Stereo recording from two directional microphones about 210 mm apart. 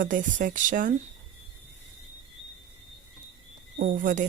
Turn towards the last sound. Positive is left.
turn(degrees=-40)  # may be behind; listen again after turning